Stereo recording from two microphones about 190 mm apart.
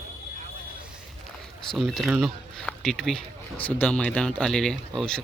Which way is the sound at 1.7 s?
Centre (ahead or behind).